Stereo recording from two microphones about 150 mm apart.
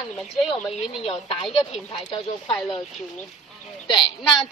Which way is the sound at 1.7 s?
35° left (ahead or behind).